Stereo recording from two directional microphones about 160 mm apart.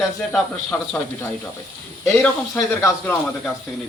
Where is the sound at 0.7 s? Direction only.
15° left (ahead or behind).